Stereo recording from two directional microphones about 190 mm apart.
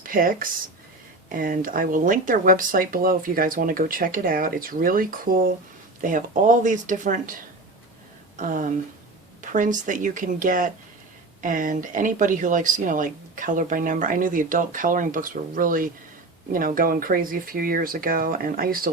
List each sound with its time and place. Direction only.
0.0 s speech: 45° right (ahead or behind)
8.4 s speech: 45° right (ahead or behind)